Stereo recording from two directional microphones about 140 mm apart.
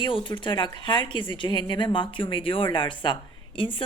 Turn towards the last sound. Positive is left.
turn(degrees=35)  # may be behind; listen again after turning